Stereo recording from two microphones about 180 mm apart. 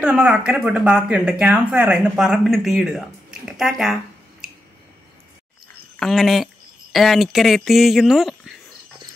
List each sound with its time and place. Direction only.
0.0 s speech: 5° right (ahead or behind)
5.9 s speech: centre (ahead or behind)